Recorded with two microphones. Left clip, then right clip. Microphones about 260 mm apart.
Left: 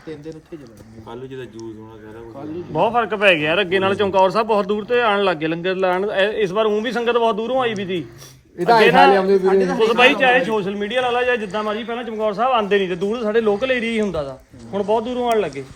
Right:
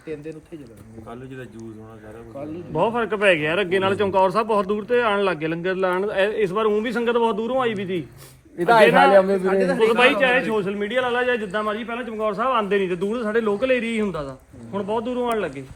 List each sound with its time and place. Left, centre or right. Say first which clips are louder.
2.7 s a man's voice: left 4 dB; left
9.1 s a man's voice: even; right
9.5 s a man's voice: left 2 dB; centre